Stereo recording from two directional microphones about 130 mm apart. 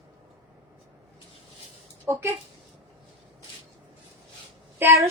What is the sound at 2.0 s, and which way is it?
Speech, 20° right (ahead or behind).